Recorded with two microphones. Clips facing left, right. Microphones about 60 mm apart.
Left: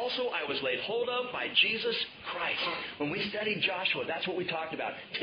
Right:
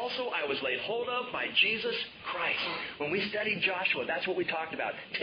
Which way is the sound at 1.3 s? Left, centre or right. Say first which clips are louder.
Even; right.